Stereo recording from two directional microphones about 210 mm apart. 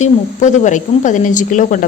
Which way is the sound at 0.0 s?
35° left (ahead or behind).